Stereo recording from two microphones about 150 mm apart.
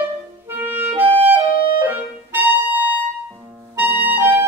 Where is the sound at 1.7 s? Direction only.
15° right (ahead or behind).